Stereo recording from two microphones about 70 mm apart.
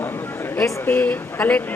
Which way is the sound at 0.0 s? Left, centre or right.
Left.